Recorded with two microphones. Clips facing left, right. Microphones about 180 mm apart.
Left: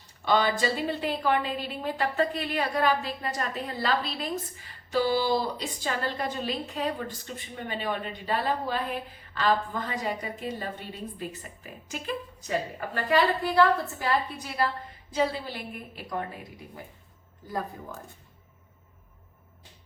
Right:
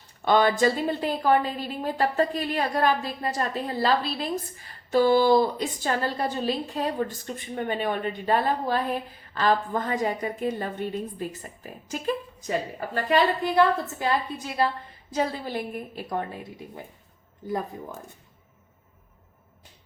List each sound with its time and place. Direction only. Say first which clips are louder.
0.3 s a woman's voice: right 4 dB; 50° right (ahead or behind)
4.9 s a woman's voice: right 6 dB; 50° right (ahead or behind)
7.3 s a woman's voice: right 8 dB; 50° right (ahead or behind)
12.9 s a woman's voice: right 2 dB; 25° right (ahead or behind)
15.1 s a woman's voice: right 1 dB; 45° right (ahead or behind)